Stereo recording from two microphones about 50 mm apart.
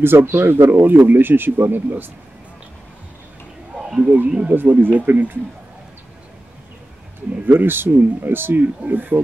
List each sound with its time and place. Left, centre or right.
0.0 s speech: right
3.7 s a sound: centre
4.5 s speech: right
7.4 s speech: right
8.5 s speech: right